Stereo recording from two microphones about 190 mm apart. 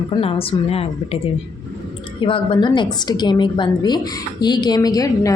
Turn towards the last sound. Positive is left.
turn(degrees=20)  # may be behind; listen again after turning